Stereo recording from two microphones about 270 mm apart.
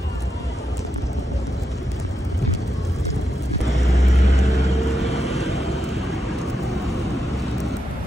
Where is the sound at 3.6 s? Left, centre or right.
Centre.